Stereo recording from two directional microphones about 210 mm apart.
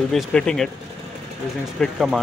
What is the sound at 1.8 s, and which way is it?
Speech, centre (ahead or behind).